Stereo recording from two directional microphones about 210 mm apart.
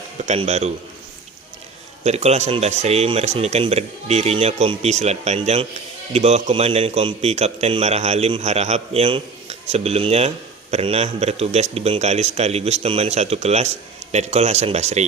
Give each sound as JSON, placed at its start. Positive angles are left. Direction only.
{"t": 0.3, "sound": "a man's voice", "side_deg": -30}
{"t": 2.0, "sound": "a man's voice", "side_deg": -30}